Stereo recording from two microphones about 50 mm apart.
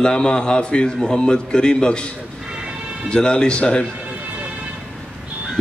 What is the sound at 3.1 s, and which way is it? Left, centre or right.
Speech, centre.